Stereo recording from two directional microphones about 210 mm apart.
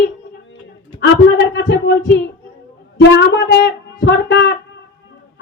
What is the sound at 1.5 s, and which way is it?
A woman's voice, 55° left (ahead or behind).